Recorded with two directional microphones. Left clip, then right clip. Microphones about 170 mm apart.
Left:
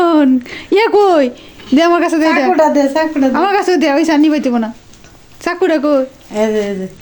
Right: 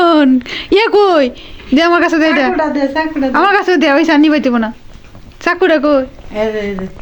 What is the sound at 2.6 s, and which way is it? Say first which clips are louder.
Speech: left 3 dB; 65° left (ahead or behind).